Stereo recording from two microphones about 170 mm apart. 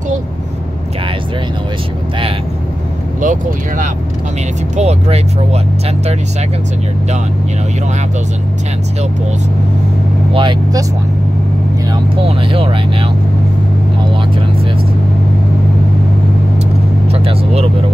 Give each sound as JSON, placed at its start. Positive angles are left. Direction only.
{"t": 3.2, "sound": "speech", "side_deg": -50}
{"t": 4.7, "sound": "speech", "side_deg": -40}
{"t": 10.3, "sound": "speech", "side_deg": -30}
{"t": 11.9, "sound": "speech", "side_deg": -30}
{"t": 17.1, "sound": "vehicle", "side_deg": -35}